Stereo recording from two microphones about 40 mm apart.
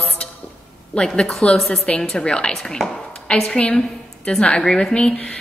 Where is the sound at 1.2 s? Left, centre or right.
Left.